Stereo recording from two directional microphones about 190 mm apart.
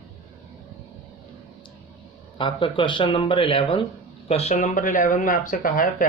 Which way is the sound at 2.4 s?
25° left (ahead or behind).